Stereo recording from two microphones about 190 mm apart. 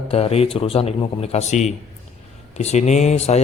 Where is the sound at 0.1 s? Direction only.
30° left (ahead or behind).